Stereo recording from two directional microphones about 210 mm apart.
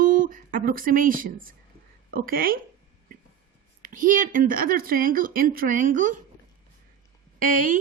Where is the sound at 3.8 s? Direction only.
40° right (ahead or behind).